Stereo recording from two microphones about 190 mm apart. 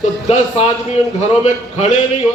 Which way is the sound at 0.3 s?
35° left (ahead or behind).